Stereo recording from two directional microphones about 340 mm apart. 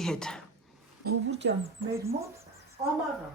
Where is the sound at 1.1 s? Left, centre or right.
Right.